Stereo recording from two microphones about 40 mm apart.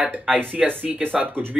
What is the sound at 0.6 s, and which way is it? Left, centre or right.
Speech, right.